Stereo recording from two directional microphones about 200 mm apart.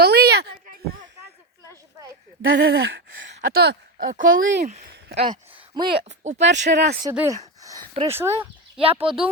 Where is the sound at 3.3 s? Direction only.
45° right (ahead or behind).